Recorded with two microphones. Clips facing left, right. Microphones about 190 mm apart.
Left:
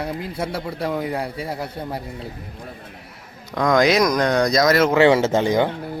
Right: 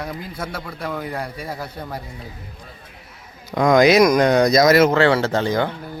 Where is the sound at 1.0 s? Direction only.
20° left (ahead or behind).